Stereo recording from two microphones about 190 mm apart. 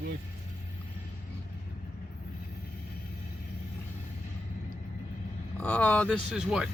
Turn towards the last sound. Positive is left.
turn(degrees=-5)  # may be behind; listen again after turning